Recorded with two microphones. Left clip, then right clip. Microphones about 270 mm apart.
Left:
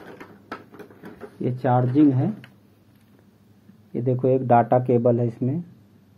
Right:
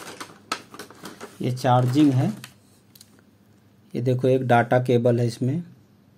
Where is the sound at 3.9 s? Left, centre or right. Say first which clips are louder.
Even; right.